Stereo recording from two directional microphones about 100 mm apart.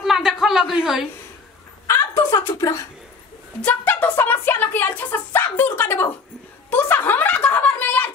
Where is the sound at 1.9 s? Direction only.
25° left (ahead or behind).